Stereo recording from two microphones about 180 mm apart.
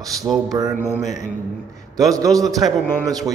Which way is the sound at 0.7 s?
10° left (ahead or behind).